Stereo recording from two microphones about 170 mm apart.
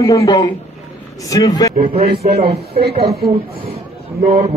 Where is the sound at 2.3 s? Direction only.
35° right (ahead or behind).